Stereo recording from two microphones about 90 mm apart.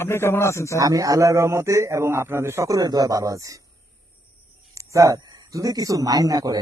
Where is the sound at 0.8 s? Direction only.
40° right (ahead or behind).